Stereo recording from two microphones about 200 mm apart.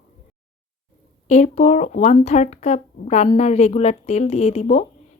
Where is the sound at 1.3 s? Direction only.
35° left (ahead or behind).